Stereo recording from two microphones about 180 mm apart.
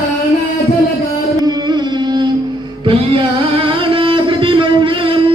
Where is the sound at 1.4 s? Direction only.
25° right (ahead or behind).